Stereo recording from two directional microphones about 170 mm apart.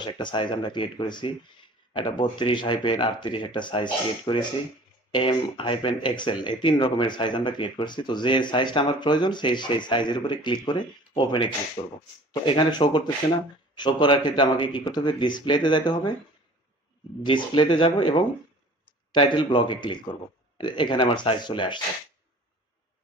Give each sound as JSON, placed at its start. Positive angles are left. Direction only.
{"t": 0.0, "sound": "speech", "side_deg": 25}
{"t": 17.2, "sound": "speech", "side_deg": 30}